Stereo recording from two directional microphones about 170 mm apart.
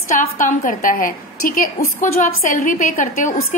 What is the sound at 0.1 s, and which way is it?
A woman's voice, 50° left (ahead or behind).